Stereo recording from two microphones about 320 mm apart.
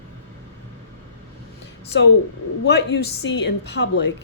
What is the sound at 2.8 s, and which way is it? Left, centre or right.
Speech, left.